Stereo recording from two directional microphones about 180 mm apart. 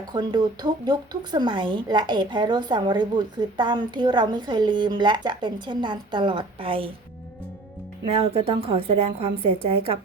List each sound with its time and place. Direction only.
0.1 s a woman's voice: 25° right (ahead or behind)
8.3 s a woman's voice: 30° right (ahead or behind)